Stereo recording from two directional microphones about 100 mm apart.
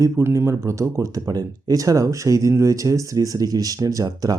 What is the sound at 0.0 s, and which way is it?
Speech, 25° right (ahead or behind).